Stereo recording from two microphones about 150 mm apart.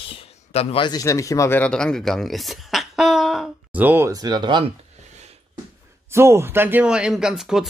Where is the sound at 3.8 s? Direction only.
15° right (ahead or behind); by 4.7 s 30° right (ahead or behind).